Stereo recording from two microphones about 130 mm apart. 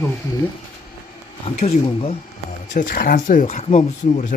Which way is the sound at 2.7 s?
85° left.